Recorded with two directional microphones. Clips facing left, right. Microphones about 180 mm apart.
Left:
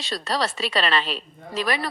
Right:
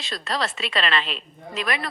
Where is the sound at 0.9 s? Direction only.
Centre (ahead or behind).